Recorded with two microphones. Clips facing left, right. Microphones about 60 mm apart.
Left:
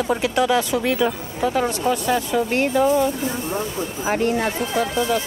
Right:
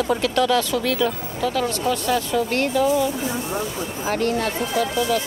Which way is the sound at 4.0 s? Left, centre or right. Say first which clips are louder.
Left 1 dB; centre.